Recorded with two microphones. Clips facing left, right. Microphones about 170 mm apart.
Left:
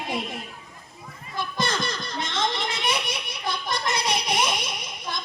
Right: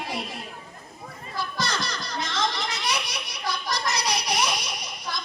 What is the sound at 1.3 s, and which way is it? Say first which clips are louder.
Children playing: left 2 dB; 25° left (ahead or behind).